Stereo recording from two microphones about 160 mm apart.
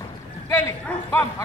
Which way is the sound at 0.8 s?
15° left (ahead or behind).